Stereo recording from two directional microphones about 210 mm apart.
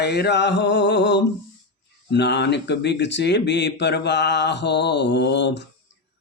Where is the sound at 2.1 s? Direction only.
55° left (ahead or behind).